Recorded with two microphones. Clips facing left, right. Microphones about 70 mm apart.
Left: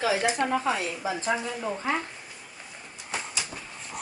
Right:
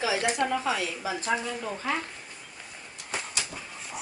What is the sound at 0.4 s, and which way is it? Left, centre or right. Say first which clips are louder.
Speech: left 1 dB; left.